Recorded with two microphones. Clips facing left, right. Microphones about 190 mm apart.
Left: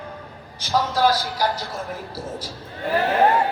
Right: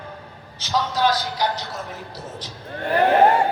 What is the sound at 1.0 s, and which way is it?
Speech, 10° left (ahead or behind).